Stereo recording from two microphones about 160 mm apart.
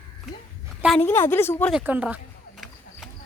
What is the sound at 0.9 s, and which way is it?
Speech, 15° left (ahead or behind).